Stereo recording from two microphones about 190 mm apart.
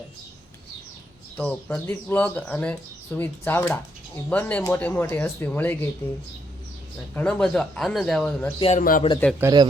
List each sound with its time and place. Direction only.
1.4 s speech: 5° left (ahead or behind)
7.1 s speech: 5° left (ahead or behind)
8.7 s a man's voice: 45° left (ahead or behind)
9.4 s speech: 20° right (ahead or behind)